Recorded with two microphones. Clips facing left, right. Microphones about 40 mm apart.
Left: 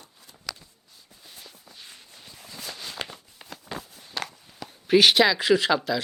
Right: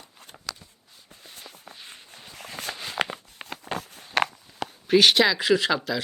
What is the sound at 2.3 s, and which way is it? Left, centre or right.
Walk, right.